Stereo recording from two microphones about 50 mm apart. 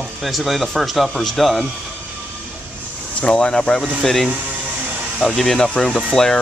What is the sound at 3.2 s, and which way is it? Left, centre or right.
Speech, left.